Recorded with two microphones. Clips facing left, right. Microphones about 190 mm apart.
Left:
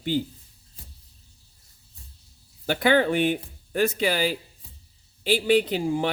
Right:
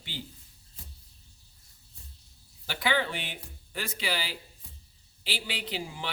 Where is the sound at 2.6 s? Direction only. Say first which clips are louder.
Left 9 dB; 50° left (ahead or behind).